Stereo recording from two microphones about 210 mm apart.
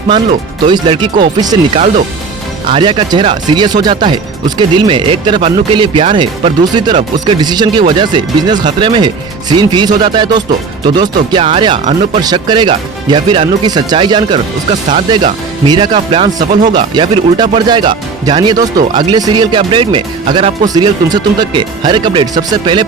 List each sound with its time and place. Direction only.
0.3 s speech: 25° right (ahead or behind)
14.7 s speech: 35° right (ahead or behind)
16.7 s speech: 20° right (ahead or behind)